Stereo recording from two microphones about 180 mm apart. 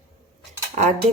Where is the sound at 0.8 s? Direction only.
40° right (ahead or behind).